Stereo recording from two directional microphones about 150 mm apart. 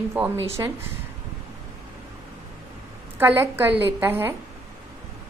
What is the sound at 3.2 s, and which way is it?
A woman's voice, 15° right (ahead or behind).